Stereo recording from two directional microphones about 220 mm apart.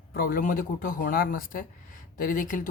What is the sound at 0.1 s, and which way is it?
Speech, 40° left (ahead or behind).